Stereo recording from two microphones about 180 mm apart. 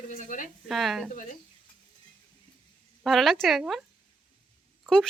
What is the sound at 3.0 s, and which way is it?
Speech, centre (ahead or behind).